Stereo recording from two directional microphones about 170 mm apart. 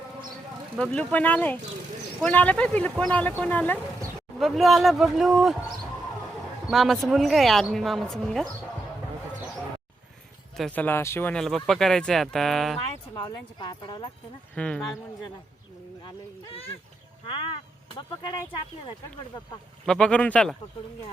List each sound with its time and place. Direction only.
0.8 s speech: 5° left (ahead or behind)
6.7 s speech: centre (ahead or behind)
10.6 s speech: 10° left (ahead or behind)
13.1 s speech: 30° left (ahead or behind)
14.5 s speech: 5° left (ahead or behind)
16.0 s speech: 30° left (ahead or behind)
17.9 s speech: 25° left (ahead or behind)
19.8 s speech: 5° left (ahead or behind)